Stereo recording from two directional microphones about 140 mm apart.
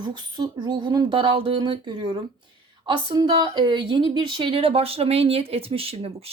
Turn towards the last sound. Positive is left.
turn(degrees=-45)  # may be behind; listen again after turning